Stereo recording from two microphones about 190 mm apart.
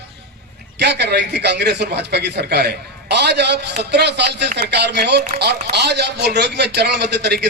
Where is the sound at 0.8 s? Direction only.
60° right (ahead or behind).